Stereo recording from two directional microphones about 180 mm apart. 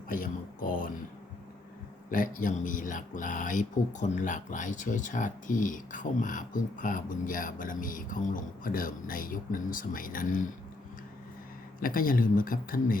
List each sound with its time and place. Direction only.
0.1 s speech: 50° left (ahead or behind)
2.0 s speech: 50° left (ahead or behind)
11.8 s speech: 50° left (ahead or behind)